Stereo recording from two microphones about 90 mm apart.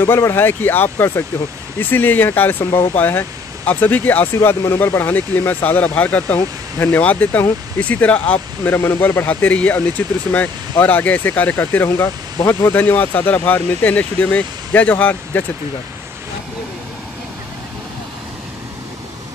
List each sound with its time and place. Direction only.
0.0 s speech: 25° left (ahead or behind)